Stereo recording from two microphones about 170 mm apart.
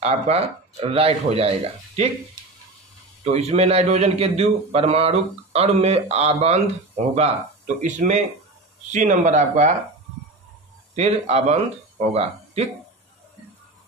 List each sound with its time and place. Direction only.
0.0 s a man's voice: 35° right (ahead or behind)
3.3 s a man's voice: 40° right (ahead or behind)
11.0 s a man's voice: 40° right (ahead or behind)